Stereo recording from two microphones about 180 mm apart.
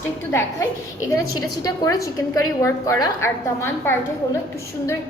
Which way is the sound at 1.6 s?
20° left (ahead or behind).